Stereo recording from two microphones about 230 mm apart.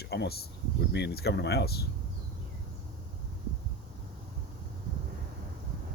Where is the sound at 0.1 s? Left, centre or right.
Left.